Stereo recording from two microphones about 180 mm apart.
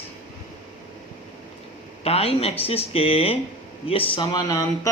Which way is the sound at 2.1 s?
35° left (ahead or behind).